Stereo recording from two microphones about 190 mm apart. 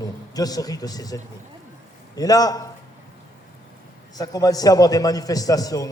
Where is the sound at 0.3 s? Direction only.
20° left (ahead or behind).